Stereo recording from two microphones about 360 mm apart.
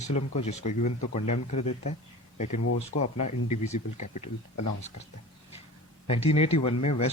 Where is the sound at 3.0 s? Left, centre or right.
Centre.